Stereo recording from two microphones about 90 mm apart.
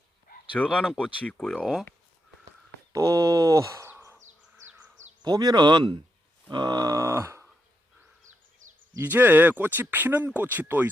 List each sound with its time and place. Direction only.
0.6 s speech: 10° left (ahead or behind)
2.9 s speech: 40° right (ahead or behind)
5.2 s speech: 50° right (ahead or behind)
6.5 s grunt: 50° right (ahead or behind); by 7.4 s 30° right (ahead or behind)
9.0 s speech: 20° right (ahead or behind)